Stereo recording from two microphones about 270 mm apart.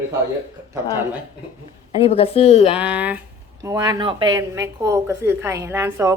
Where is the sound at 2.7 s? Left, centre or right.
Centre.